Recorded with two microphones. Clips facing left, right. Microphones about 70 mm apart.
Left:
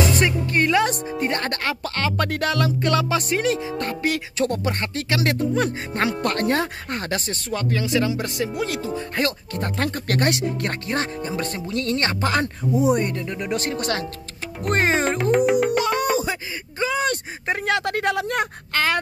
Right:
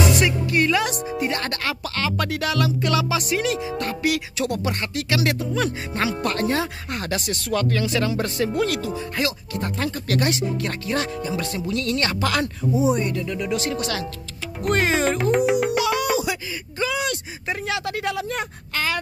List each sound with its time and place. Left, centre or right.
0.2 s speech: left
9.2 s speech: left
12.9 s speech: left
13.2 s speech: left
15.3 s music: centre
16.2 s a sound: left
17.1 s speech: left